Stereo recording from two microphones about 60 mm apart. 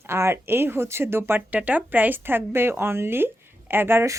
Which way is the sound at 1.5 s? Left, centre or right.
Right.